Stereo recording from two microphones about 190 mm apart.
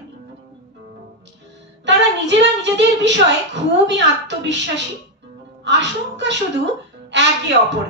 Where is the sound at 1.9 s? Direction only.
70° right (ahead or behind).